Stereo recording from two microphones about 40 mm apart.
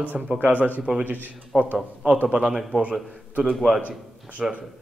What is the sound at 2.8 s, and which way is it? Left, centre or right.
Speech, right.